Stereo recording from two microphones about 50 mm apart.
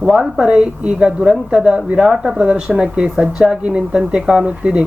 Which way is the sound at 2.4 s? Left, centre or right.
Centre.